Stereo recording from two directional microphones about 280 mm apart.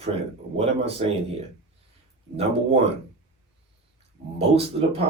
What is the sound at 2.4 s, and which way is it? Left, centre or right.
Speech, right.